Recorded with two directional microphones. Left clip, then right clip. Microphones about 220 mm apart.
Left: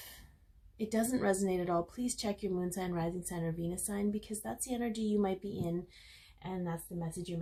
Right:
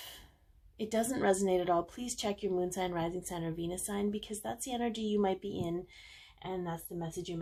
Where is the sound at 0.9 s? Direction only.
35° right (ahead or behind).